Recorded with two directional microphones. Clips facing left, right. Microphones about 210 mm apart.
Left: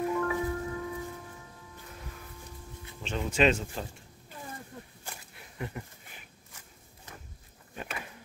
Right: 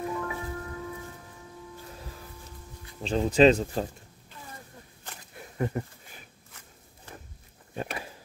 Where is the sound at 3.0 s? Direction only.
35° right (ahead or behind).